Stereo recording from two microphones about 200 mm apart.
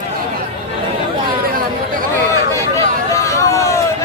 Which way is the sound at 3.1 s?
15° left (ahead or behind).